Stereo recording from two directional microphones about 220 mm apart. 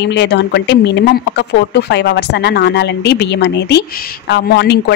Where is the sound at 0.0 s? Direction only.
50° left (ahead or behind).